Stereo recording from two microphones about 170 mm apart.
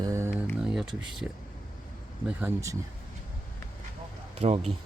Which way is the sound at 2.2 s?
15° right (ahead or behind).